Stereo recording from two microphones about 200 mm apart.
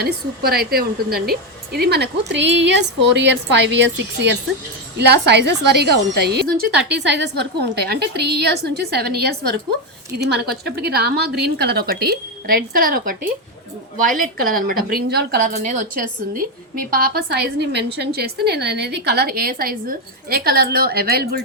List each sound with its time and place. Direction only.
0.0 s a woman's voice: 50° right (ahead or behind)